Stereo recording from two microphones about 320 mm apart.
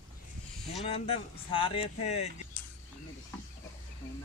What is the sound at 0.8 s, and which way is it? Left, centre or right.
Speech, centre.